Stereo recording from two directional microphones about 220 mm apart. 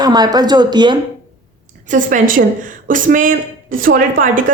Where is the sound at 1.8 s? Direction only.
35° right (ahead or behind).